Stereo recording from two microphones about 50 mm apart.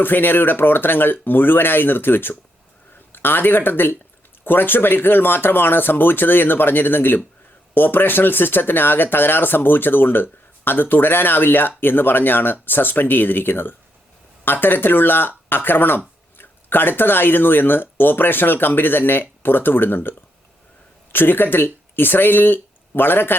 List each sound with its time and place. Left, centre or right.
0.0 s speech: left
16.4 s a sound: left
17.0 s speech: left